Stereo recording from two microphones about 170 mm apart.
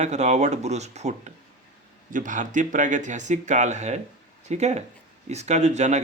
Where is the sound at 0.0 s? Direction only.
45° right (ahead or behind).